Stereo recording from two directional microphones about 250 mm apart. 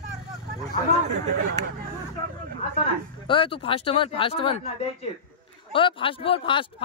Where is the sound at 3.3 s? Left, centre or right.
Left.